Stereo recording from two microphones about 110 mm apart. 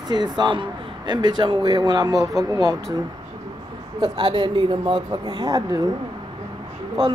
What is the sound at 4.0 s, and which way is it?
Speech, 45° right (ahead or behind).